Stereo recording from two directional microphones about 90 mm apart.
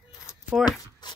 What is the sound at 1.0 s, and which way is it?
Shuffle, 55° left (ahead or behind).